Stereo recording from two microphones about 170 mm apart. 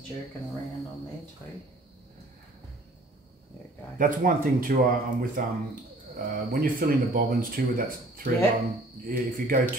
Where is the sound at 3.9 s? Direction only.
50° right (ahead or behind).